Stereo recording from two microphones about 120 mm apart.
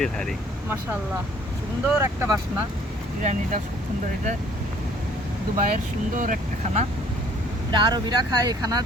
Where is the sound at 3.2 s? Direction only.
75° right (ahead or behind).